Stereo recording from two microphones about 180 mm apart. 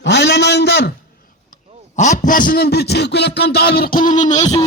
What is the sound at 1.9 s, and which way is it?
A man's voice, 40° left (ahead or behind).